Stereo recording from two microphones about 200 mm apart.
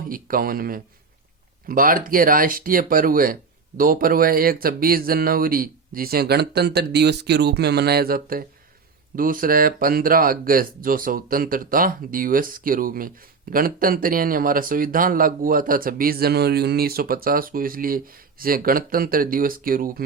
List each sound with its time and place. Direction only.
0.1 s speech: 45° right (ahead or behind)